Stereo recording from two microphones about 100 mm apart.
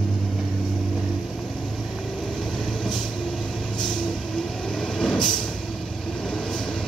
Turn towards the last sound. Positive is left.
turn(degrees=5)  # may be behind; listen again after turning